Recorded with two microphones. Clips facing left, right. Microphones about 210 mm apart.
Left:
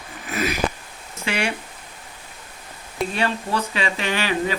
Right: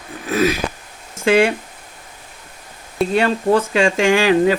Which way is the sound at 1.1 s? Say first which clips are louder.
Right 12 dB; 50° right (ahead or behind).